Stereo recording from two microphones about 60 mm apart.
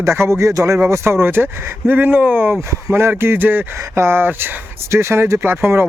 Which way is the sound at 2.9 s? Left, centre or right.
Right.